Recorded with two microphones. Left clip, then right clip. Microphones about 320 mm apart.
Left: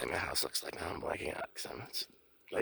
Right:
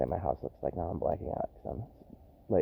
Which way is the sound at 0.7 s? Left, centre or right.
Left.